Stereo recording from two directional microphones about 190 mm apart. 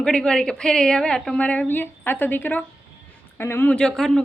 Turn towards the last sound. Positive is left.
turn(degrees=5)  # may be behind; listen again after turning